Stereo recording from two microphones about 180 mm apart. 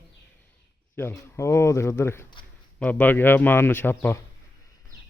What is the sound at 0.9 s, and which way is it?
A man's voice, 15° left (ahead or behind).